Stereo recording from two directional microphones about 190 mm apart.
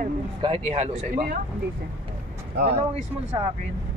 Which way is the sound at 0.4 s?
30° right (ahead or behind).